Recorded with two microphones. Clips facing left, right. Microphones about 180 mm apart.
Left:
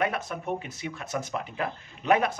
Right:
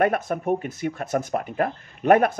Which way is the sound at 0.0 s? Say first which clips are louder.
Right 7 dB; 50° right (ahead or behind).